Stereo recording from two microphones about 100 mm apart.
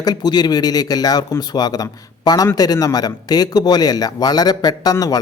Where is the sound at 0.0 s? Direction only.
45° left (ahead or behind).